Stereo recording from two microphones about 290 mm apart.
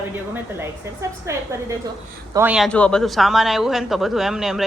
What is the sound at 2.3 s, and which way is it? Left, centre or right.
A man's voice, centre.